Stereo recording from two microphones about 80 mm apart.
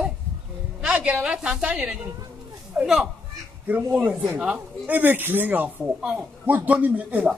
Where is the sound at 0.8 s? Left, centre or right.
Centre.